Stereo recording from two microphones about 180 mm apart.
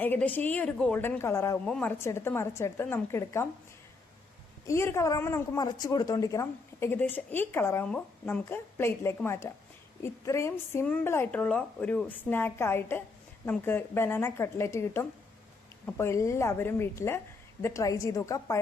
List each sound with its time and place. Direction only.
0.0 s a woman's voice: 10° left (ahead or behind)
4.6 s a woman's voice: 15° left (ahead or behind)